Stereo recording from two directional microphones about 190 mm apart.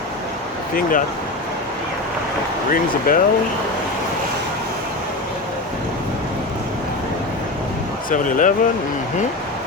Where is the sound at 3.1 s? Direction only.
50° left (ahead or behind).